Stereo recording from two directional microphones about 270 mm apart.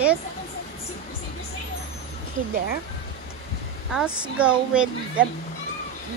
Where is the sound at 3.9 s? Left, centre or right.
Centre.